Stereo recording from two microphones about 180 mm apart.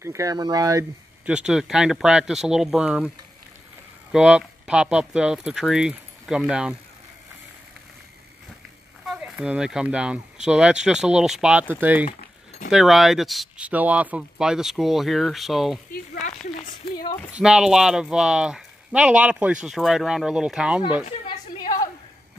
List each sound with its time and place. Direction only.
0.0 s speech: 15° right (ahead or behind)
1.2 s speech: 5° right (ahead or behind)
4.1 s speech: 5° right (ahead or behind)
9.0 s speech: 5° right (ahead or behind)
15.9 s a sound: 45° left (ahead or behind)
17.3 s speech: 5° right (ahead or behind)
21.3 s a sound: 25° left (ahead or behind)